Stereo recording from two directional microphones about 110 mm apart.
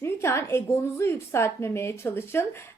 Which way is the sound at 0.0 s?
25° left (ahead or behind).